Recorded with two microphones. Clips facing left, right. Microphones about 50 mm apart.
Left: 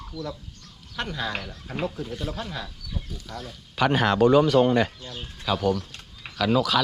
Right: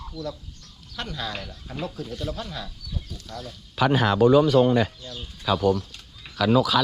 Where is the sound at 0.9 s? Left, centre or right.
Left.